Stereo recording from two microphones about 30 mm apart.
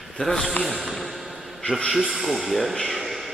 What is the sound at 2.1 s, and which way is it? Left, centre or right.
Speech, centre.